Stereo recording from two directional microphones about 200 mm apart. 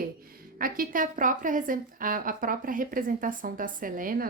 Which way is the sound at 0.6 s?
45° right (ahead or behind).